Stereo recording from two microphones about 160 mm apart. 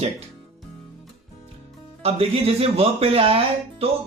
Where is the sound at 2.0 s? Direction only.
35° right (ahead or behind).